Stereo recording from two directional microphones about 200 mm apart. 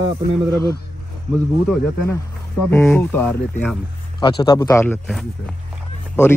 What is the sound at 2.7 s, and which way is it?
Speech, 10° left (ahead or behind).